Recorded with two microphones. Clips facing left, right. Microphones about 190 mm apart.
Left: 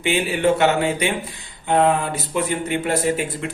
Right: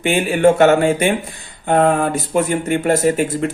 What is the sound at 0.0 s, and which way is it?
Speech, 50° right (ahead or behind).